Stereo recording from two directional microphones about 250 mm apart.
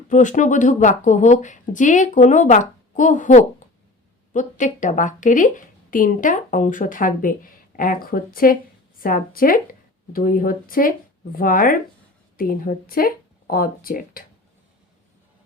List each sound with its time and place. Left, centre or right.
0.1 s a woman's voice: left